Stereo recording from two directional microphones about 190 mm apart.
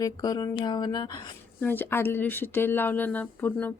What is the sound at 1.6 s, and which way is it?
Speech, 10° left (ahead or behind).